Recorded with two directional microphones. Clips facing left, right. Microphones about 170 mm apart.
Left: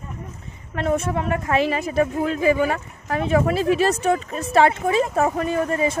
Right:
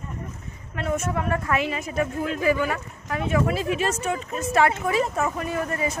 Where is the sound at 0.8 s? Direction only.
35° left (ahead or behind).